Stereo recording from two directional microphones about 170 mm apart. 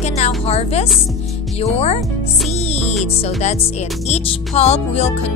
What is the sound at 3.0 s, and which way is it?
Speech, 40° left (ahead or behind).